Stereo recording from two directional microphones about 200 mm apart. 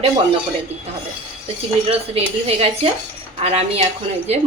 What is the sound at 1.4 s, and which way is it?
A woman's voice, 30° right (ahead or behind).